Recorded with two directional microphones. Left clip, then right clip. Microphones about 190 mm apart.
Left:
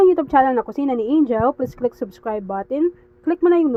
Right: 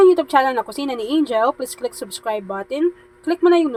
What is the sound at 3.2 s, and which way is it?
Speech, 15° left (ahead or behind).